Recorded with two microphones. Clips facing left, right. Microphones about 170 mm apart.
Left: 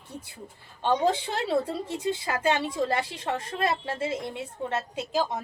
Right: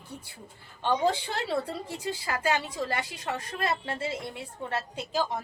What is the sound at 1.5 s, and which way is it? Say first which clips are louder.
A woman's voice: left 5 dB; 25° left (ahead or behind).